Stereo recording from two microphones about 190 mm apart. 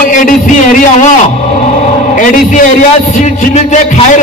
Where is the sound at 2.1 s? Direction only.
45° left (ahead or behind).